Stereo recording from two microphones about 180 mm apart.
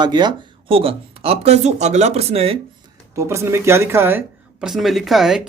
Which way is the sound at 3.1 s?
15° right (ahead or behind).